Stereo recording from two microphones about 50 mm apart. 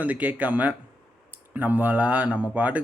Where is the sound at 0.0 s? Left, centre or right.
Right.